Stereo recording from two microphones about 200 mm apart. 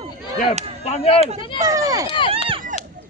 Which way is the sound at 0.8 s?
30° left (ahead or behind).